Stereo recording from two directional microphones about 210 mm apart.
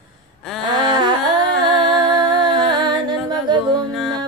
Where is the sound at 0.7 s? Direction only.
20° right (ahead or behind).